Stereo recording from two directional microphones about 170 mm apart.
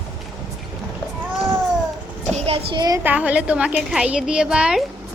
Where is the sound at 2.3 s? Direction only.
35° right (ahead or behind).